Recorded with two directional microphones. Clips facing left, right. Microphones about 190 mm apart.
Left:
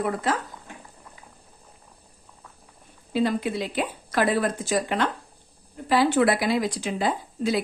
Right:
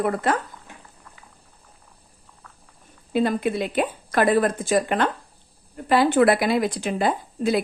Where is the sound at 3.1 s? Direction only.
55° right (ahead or behind).